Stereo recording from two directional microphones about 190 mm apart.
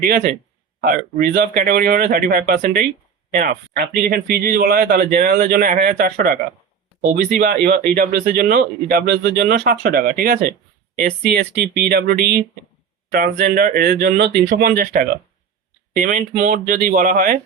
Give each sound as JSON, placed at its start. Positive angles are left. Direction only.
{"t": 0.0, "sound": "speech", "side_deg": -45}